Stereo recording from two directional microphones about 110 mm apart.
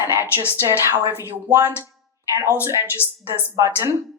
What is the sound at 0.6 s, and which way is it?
A woman's voice, 25° right (ahead or behind).